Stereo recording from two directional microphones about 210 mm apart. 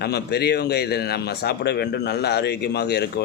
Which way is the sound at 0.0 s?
50° left (ahead or behind).